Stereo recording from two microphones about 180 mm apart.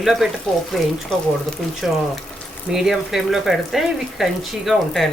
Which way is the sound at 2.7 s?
Centre (ahead or behind).